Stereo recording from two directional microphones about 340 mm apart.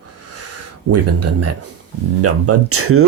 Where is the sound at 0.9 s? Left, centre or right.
Right.